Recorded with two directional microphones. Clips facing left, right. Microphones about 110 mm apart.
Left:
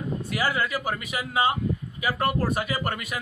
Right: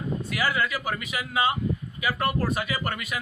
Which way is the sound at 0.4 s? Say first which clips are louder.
Left 1 dB; 30° left (ahead or behind).